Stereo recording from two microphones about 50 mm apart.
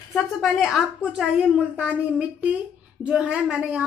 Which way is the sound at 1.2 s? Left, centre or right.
Right.